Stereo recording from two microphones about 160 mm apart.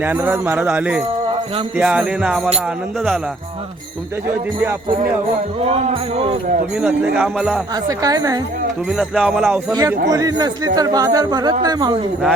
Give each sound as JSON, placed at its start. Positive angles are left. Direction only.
{"t": 0.0, "sound": "jingle bell", "side_deg": -15}
{"t": 1.8, "sound": "speech", "side_deg": -5}
{"t": 5.6, "sound": "music", "side_deg": -40}
{"t": 6.7, "sound": "speech", "side_deg": -10}
{"t": 7.9, "sound": "a man's voice", "side_deg": -20}
{"t": 8.9, "sound": "speech", "side_deg": -5}
{"t": 10.1, "sound": "a man's voice", "side_deg": -25}